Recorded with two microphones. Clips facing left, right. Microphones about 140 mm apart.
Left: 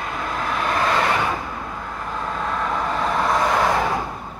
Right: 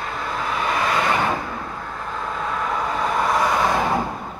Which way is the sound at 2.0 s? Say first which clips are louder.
Left 1 dB; centre (ahead or behind).